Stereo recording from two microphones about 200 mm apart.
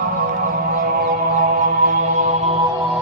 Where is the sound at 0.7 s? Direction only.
50° right (ahead or behind).